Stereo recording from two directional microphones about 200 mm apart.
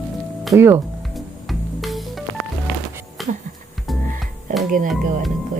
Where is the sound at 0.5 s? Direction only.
10° right (ahead or behind).